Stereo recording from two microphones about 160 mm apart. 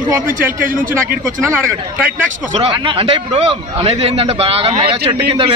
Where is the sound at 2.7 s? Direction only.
35° right (ahead or behind).